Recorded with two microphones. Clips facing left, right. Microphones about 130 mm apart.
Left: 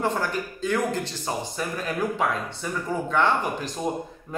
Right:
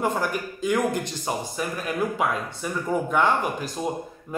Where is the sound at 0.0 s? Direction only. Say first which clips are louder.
Right 1 dB; 10° right (ahead or behind).